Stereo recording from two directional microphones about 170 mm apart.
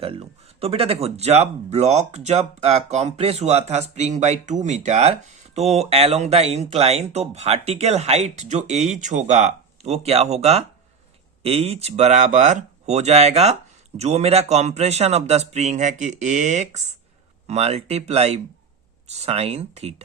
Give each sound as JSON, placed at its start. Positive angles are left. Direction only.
{"t": 0.0, "sound": "speech", "side_deg": -35}